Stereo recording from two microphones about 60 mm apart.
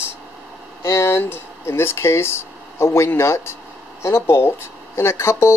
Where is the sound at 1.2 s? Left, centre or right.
Left.